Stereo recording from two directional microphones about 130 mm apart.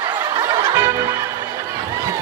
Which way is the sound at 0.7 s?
20° right (ahead or behind).